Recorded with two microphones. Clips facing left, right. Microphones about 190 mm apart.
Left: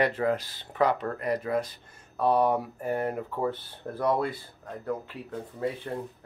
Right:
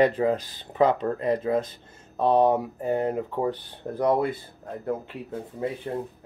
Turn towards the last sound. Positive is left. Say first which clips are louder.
# right 4 dB
turn(degrees=-20)  # may be behind; listen again after turning